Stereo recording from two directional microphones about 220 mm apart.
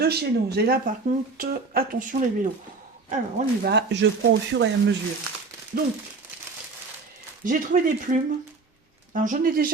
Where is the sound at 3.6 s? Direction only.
50° right (ahead or behind).